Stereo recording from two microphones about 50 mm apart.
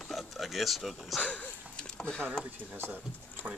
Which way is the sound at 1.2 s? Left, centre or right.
Left.